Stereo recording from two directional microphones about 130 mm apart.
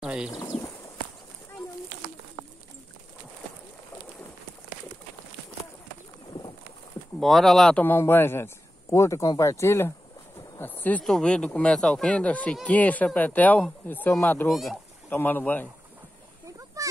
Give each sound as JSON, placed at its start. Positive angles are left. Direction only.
{"t": 0.0, "sound": "speech", "side_deg": -5}
{"t": 0.4, "sound": "pigeon", "side_deg": 30}
{"t": 7.2, "sound": "speech", "side_deg": 0}
{"t": 7.8, "sound": "speech", "side_deg": 15}
{"t": 14.5, "sound": "speech", "side_deg": 0}
{"t": 15.0, "sound": "speech", "side_deg": 15}